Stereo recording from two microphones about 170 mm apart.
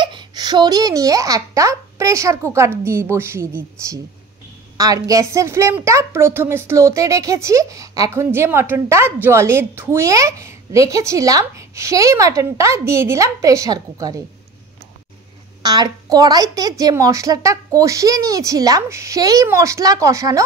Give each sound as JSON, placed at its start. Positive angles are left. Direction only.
{"t": 0.0, "sound": "a woman's voice", "side_deg": -25}
{"t": 15.6, "sound": "a woman's voice", "side_deg": -25}